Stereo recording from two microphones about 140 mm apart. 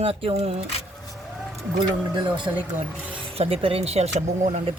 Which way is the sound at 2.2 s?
35° right (ahead or behind).